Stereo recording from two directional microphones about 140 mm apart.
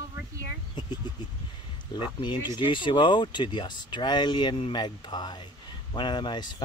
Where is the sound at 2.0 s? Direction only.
35° left (ahead or behind).